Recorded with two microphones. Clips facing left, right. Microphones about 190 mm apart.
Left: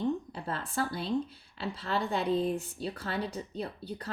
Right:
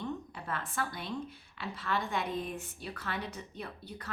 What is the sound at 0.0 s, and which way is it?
Speech, 30° left (ahead or behind).